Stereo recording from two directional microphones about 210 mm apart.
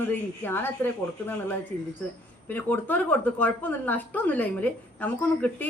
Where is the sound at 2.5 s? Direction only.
10° left (ahead or behind).